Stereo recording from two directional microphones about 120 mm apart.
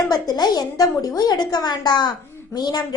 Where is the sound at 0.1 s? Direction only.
35° left (ahead or behind).